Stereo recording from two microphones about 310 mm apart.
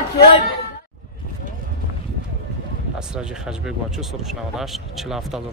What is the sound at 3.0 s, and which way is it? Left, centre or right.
Speech, centre.